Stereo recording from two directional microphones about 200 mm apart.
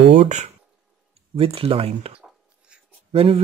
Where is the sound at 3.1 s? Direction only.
30° right (ahead or behind).